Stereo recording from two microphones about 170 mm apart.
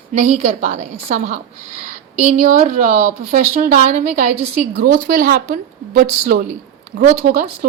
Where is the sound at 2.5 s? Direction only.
50° right (ahead or behind).